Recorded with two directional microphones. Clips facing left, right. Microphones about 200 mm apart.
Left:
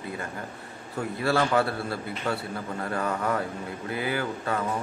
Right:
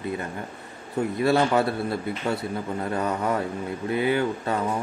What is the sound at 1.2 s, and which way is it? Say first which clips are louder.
Speech: right 3 dB; 20° right (ahead or behind).